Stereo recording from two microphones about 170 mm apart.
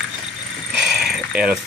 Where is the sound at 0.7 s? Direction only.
Centre (ahead or behind).